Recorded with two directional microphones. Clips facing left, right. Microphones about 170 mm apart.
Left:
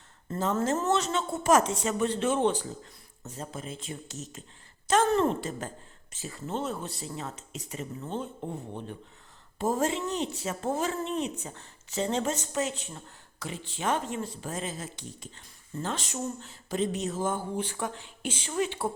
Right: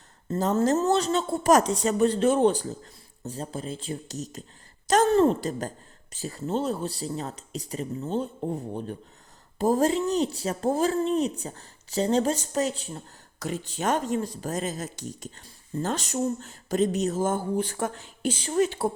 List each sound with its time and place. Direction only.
0.3 s speech: 40° right (ahead or behind)
9.6 s speech: 35° right (ahead or behind)